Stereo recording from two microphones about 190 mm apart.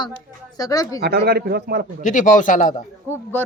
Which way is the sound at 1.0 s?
55° right (ahead or behind).